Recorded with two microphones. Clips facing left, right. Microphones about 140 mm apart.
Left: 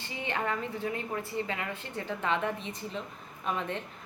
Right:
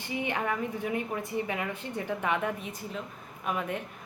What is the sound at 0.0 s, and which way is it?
A woman's voice, 15° right (ahead or behind).